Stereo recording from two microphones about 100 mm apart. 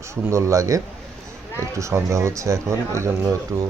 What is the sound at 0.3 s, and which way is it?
Speech, 30° right (ahead or behind).